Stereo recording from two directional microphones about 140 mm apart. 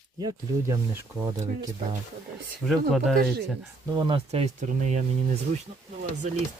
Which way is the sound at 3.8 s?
30° right (ahead or behind).